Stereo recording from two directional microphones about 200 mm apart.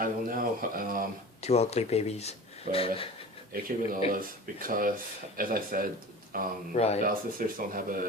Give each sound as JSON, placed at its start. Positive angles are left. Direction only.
{"t": 0.0, "sound": "speech", "side_deg": -45}
{"t": 1.4, "sound": "speech", "side_deg": 30}
{"t": 3.5, "sound": "speech", "side_deg": -45}
{"t": 6.7, "sound": "speech", "side_deg": 30}
{"t": 7.0, "sound": "speech", "side_deg": -45}